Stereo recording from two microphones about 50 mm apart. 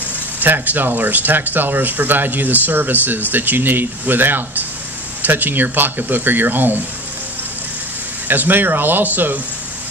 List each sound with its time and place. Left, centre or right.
0.4 s speech: right
8.3 s speech: right